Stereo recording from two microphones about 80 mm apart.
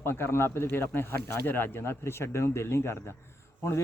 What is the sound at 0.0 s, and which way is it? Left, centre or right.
Speech, left.